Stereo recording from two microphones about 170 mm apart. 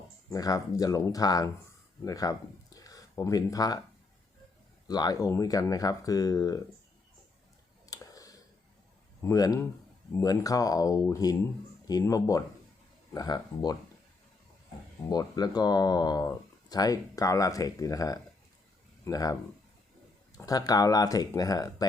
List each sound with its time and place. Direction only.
0.3 s speech: 20° left (ahead or behind)
2.7 s a sound: 20° left (ahead or behind)
4.9 s speech: 25° left (ahead or behind)
7.9 s clicking: 20° left (ahead or behind)
9.2 s speech: 20° left (ahead or behind)
15.1 s speech: 25° left (ahead or behind)
20.4 s speech: 20° left (ahead or behind)